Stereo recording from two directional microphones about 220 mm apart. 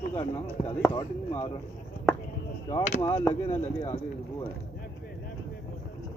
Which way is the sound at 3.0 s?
10° left (ahead or behind).